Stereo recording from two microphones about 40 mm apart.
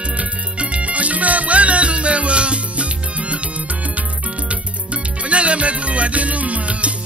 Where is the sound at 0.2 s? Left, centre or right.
Right.